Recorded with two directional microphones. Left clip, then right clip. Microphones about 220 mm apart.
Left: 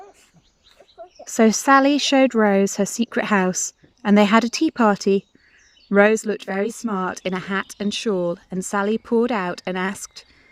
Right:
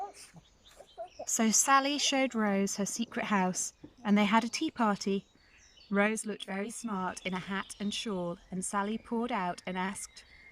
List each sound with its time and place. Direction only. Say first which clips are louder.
1.4 s speech: left 12 dB; 40° left (ahead or behind)